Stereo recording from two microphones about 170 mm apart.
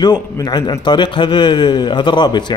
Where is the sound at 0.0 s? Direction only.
25° left (ahead or behind).